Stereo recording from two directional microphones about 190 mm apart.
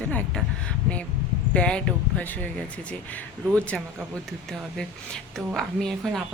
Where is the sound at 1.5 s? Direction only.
5° left (ahead or behind).